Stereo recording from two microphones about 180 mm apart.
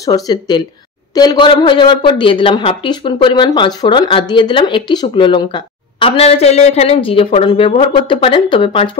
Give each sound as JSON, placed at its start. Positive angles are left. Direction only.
{"t": 0.0, "sound": "a woman's voice", "side_deg": 20}